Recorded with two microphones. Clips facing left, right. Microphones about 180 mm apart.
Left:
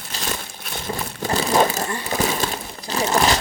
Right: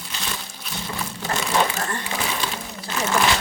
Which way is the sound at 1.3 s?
35° left (ahead or behind).